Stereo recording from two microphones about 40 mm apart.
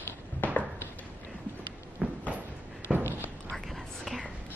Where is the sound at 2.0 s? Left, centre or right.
Right.